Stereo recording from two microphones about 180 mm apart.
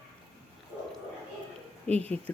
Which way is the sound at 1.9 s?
5° left (ahead or behind).